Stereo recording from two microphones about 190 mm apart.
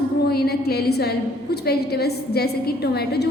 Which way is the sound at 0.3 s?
55° left (ahead or behind).